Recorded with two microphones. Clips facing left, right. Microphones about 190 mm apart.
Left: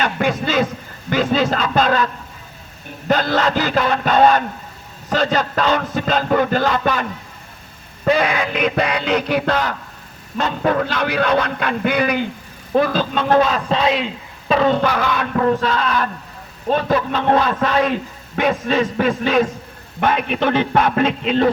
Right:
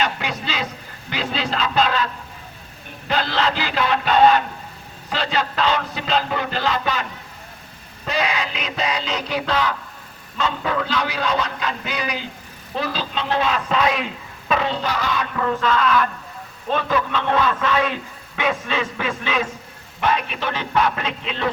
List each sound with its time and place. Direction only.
0.0 s a sound: 50° left (ahead or behind)
1.1 s speech: 50° left (ahead or behind)
3.1 s a man's voice: 45° left (ahead or behind)
8.0 s a man's voice: 55° left (ahead or behind); by 14.7 s 30° left (ahead or behind)
14.7 s a man's voice: 55° left (ahead or behind)
20.0 s a man's voice: 55° left (ahead or behind)